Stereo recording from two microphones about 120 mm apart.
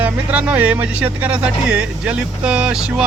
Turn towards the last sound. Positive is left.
turn(degrees=-5)  # may be behind; listen again after turning